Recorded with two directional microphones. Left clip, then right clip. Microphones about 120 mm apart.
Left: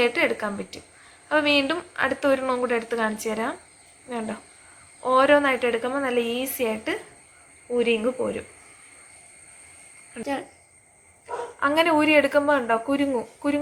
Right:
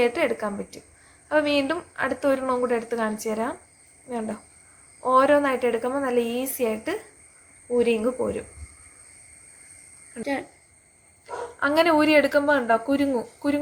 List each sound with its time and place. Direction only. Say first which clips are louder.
0.0 s a woman's voice: left 1 dB; 30° right (ahead or behind)
11.6 s a woman's voice: right 1 dB; 30° right (ahead or behind)